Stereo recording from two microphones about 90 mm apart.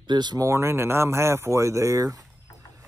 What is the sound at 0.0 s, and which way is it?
Speech, 55° right (ahead or behind).